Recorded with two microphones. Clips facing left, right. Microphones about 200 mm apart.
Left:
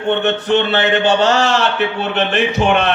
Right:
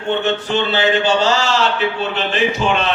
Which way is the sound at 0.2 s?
60° left (ahead or behind).